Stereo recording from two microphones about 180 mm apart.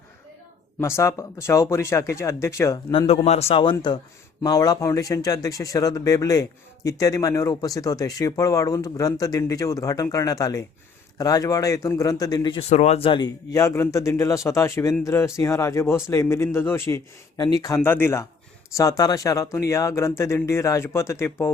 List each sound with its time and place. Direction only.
0.8 s speech: 15° left (ahead or behind)
3.1 s a man's voice: 35° left (ahead or behind); by 21.5 s 15° left (ahead or behind)